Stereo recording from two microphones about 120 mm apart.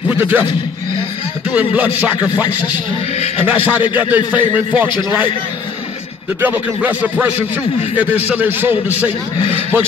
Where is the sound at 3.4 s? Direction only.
15° right (ahead or behind).